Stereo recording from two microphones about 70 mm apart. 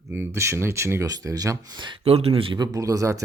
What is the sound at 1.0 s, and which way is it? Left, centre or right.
Speech, right.